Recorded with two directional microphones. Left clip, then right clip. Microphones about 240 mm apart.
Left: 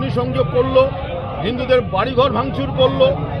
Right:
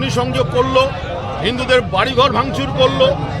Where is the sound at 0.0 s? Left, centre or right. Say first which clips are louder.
Right 2 dB; centre.